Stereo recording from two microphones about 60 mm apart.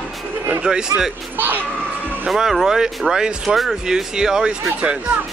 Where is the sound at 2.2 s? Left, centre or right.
Centre.